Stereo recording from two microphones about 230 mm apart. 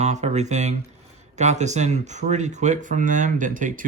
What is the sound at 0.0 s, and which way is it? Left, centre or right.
Speech, right.